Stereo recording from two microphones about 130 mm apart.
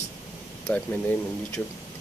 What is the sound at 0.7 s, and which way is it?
Speech, 10° left (ahead or behind).